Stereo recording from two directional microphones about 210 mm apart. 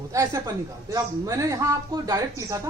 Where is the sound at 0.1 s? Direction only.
15° right (ahead or behind).